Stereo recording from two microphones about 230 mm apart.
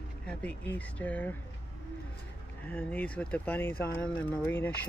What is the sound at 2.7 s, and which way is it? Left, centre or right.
Speech, centre.